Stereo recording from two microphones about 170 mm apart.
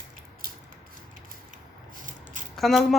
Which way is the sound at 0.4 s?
60° right (ahead or behind).